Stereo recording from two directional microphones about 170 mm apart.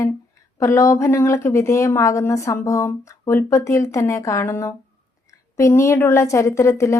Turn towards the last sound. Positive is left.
turn(degrees=15)  # may be behind; listen again after turning